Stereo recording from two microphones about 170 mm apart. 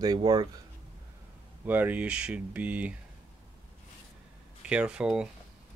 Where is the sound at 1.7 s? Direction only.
10° right (ahead or behind).